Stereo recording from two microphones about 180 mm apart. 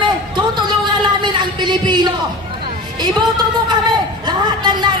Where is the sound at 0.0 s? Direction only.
25° right (ahead or behind).